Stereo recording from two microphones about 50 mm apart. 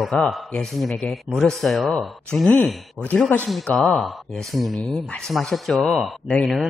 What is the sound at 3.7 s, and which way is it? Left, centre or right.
Speech, centre.